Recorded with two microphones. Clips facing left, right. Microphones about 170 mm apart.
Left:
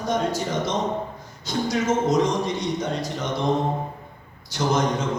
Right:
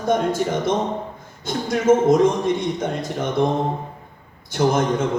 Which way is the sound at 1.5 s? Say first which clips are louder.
Right 6 dB; 55° right (ahead or behind).